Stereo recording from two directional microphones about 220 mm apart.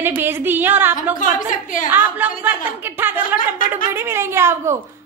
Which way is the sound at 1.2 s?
35° left (ahead or behind).